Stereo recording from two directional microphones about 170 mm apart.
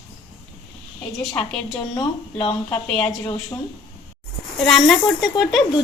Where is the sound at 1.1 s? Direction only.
20° left (ahead or behind).